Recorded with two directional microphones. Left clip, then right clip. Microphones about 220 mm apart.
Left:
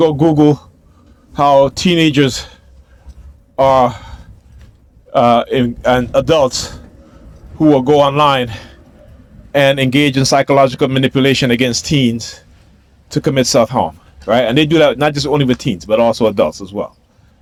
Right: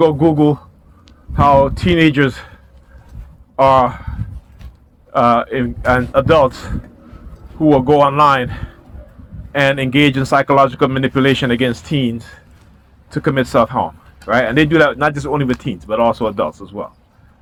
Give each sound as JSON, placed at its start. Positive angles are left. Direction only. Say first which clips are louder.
{"t": 0.0, "sound": "speech", "louder": "left 1 dB", "side_deg": 60}